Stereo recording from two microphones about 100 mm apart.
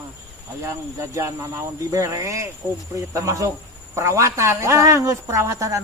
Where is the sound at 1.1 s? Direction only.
30° right (ahead or behind).